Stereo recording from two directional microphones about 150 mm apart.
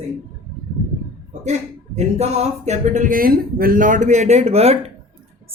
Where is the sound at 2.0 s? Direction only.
45° right (ahead or behind).